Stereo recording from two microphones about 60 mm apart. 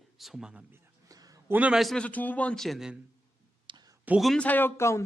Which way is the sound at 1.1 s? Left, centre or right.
Right.